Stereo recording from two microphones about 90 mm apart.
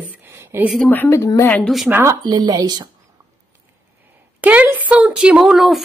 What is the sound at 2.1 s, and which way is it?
Speech, 50° right (ahead or behind).